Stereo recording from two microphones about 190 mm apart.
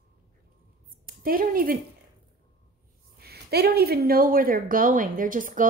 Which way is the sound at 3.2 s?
60° right (ahead or behind).